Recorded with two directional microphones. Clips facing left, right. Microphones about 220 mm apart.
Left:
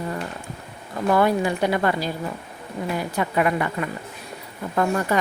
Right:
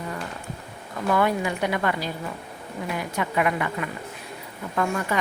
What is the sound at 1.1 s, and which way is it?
Speech, 35° left (ahead or behind).